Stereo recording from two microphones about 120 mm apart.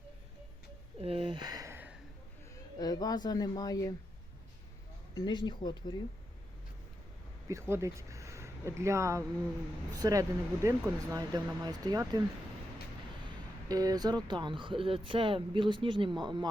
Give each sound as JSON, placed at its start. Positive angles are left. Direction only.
{"t": 1.0, "sound": "speech", "side_deg": -50}
{"t": 1.7, "sound": "a sound", "side_deg": -15}
{"t": 2.7, "sound": "speech", "side_deg": 35}
{"t": 5.1, "sound": "speech", "side_deg": 40}
{"t": 7.7, "sound": "speech", "side_deg": -25}
{"t": 13.7, "sound": "speech", "side_deg": -30}